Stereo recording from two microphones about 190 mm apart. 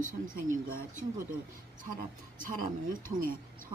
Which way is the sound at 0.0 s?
45° right (ahead or behind).